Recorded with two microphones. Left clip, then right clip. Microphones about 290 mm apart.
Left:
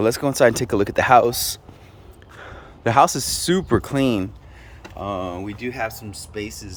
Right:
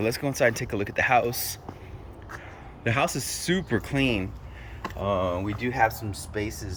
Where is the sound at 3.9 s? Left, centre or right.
Left.